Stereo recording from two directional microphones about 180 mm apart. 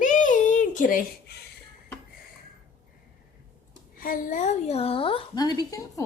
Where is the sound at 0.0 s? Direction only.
45° left (ahead or behind).